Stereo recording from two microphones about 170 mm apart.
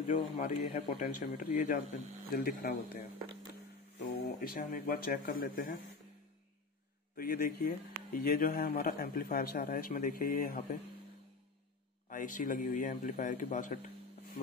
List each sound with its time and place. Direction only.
0.1 s a man's voice: 45° left (ahead or behind); by 2.8 s 60° left (ahead or behind)
4.2 s speech: 60° left (ahead or behind)
7.2 s speech: 60° left (ahead or behind)
12.1 s a man's voice: 50° left (ahead or behind)